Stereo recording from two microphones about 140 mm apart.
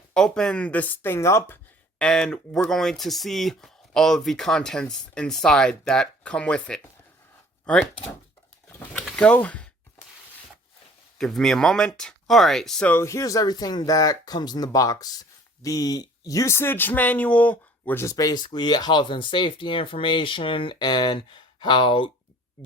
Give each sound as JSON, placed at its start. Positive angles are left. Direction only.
{"t": 0.1, "sound": "speech", "side_deg": 5}
{"t": 2.0, "sound": "speech", "side_deg": 5}
{"t": 8.9, "sound": "a sound", "side_deg": 5}
{"t": 11.2, "sound": "speech", "side_deg": 5}
{"t": 12.9, "sound": "speech", "side_deg": 20}